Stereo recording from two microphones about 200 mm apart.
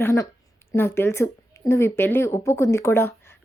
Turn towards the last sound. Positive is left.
turn(degrees=10)  # may be behind; listen again after turning